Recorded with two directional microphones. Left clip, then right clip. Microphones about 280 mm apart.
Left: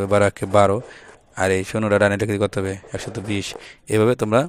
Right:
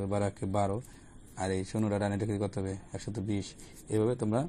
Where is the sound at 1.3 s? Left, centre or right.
Left.